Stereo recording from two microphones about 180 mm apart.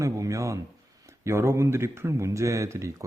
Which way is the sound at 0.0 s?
15° right (ahead or behind).